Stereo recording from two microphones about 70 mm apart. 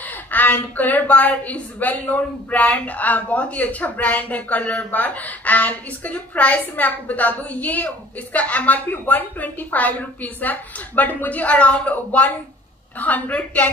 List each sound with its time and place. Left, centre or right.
0.0 s a woman's voice: left